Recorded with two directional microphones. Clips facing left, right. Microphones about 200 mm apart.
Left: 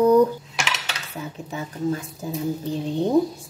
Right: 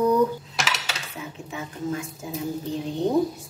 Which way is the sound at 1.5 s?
35° left (ahead or behind).